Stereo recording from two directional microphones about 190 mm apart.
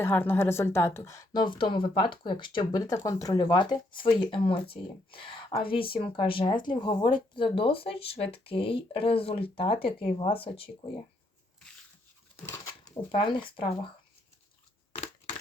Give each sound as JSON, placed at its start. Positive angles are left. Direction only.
{"t": 0.0, "sound": "a woman's voice", "side_deg": 10}
{"t": 12.5, "sound": "a sound", "side_deg": 15}
{"t": 14.9, "sound": "crushing", "side_deg": 35}